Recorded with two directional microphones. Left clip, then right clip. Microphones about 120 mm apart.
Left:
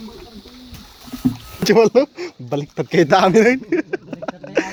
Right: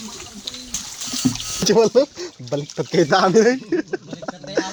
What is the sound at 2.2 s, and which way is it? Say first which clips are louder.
Speech: left 1 dB; 75° left (ahead or behind).